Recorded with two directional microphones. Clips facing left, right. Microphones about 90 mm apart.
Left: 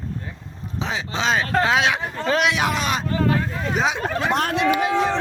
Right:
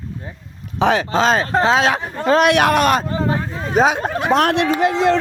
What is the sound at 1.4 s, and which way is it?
Speech, 30° right (ahead or behind).